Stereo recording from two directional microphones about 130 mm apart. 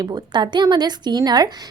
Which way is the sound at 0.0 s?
35° right (ahead or behind).